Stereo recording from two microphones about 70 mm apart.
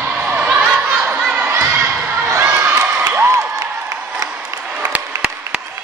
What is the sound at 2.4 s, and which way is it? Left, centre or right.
Crowd, right.